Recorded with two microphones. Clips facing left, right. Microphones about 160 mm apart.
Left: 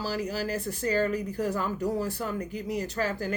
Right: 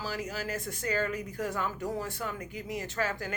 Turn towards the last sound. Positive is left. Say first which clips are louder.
# left 3 dB
turn(degrees=35)  # may be behind; listen again after turning